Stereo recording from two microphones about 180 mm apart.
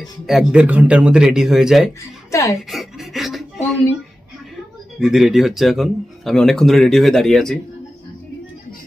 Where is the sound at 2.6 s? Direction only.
Centre (ahead or behind).